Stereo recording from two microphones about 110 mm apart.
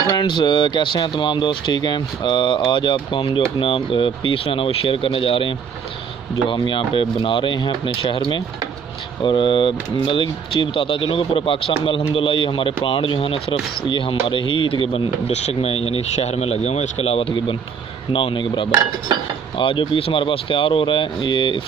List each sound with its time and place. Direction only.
0.1 s speech: 45° left (ahead or behind); by 17.6 s 65° left (ahead or behind)
18.1 s speech: 50° left (ahead or behind)